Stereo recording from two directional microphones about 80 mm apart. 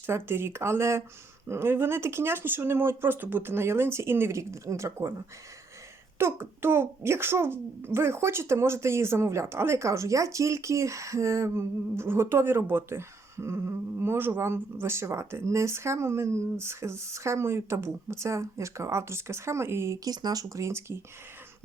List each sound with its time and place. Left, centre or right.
0.1 s a child's voice: right
6.1 s a child's voice: right
20.1 s a child's voice: right